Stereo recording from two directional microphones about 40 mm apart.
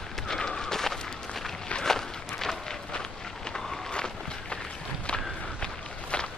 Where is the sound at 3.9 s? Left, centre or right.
Left.